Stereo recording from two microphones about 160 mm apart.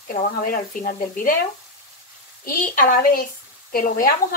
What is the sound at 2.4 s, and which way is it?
Speech, 60° left (ahead or behind).